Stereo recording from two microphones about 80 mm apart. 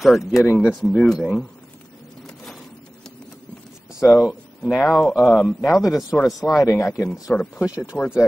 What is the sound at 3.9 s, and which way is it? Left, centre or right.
Speech, left.